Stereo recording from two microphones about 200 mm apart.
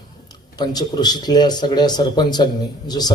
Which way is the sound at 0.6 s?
20° left (ahead or behind).